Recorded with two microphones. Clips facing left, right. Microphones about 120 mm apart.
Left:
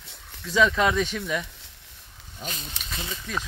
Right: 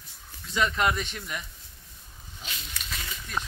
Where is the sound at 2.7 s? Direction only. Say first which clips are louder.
Left 3 dB; 25° left (ahead or behind).